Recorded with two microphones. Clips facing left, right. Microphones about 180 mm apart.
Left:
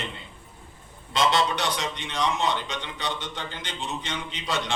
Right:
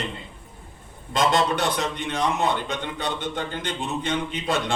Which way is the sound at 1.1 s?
50° right (ahead or behind).